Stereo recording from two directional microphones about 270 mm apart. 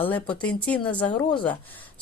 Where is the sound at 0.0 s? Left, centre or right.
Centre.